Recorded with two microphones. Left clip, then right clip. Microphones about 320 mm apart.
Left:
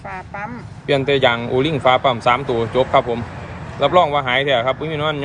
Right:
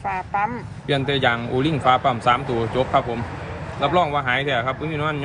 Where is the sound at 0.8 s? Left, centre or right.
Left.